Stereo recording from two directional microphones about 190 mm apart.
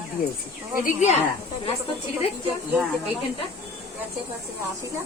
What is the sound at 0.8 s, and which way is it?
Speech, 35° left (ahead or behind).